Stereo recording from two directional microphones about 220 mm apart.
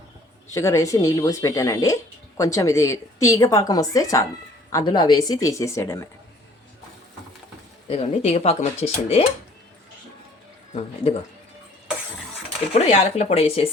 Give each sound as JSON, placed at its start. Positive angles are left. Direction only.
{"t": 0.5, "sound": "a woman's voice", "side_deg": 15}
{"t": 7.9, "sound": "speech", "side_deg": 25}
{"t": 12.7, "sound": "speech", "side_deg": 30}